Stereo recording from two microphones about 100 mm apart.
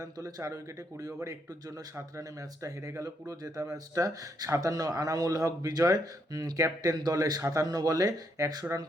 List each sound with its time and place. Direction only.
0.0 s a man's voice: 35° right (ahead or behind)